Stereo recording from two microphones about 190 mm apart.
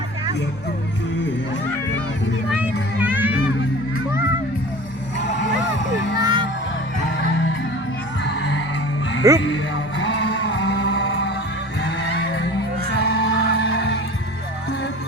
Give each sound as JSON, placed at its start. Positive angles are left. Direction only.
{"t": 2.5, "sound": "music", "side_deg": -10}
{"t": 6.1, "sound": "music", "side_deg": -25}
{"t": 8.2, "sound": "music", "side_deg": 65}
{"t": 9.2, "sound": "speech", "side_deg": -15}
{"t": 10.0, "sound": "music", "side_deg": 70}
{"t": 13.1, "sound": "music", "side_deg": 70}